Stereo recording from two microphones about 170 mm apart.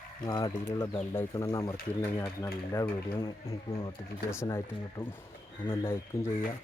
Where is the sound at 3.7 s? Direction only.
35° left (ahead or behind).